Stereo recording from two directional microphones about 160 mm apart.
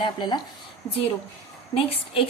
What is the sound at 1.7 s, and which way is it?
Speech, 35° left (ahead or behind).